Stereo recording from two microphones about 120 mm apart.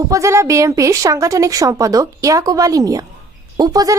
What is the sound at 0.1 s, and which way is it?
Speech, 25° right (ahead or behind).